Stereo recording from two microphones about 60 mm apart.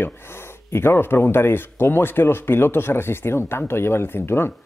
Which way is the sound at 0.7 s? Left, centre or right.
Left.